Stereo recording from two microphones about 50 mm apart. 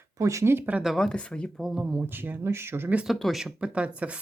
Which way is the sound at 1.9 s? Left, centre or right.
Right.